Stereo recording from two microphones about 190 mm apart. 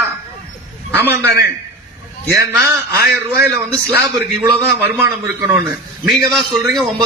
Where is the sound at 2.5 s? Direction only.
10° right (ahead or behind).